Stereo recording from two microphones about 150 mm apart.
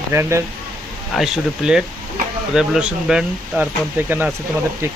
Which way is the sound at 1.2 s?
5° right (ahead or behind).